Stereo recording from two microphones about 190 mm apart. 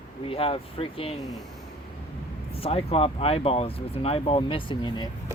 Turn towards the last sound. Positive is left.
turn(degrees=25)  # may be behind; listen again after turning